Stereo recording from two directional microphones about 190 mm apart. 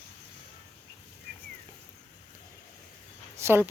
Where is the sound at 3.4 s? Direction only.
10° right (ahead or behind).